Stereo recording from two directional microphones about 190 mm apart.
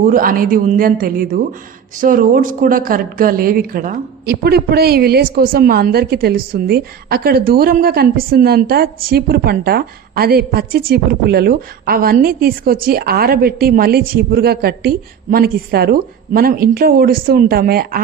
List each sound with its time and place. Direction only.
0.0 s speech: 50° right (ahead or behind)